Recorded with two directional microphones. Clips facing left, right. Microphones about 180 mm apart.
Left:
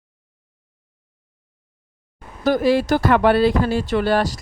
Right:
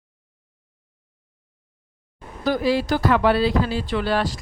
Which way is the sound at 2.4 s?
50° left (ahead or behind).